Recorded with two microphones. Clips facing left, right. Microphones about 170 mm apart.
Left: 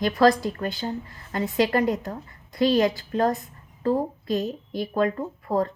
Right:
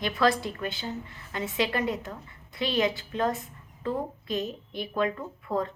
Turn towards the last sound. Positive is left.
turn(degrees=40)  # may be behind; listen again after turning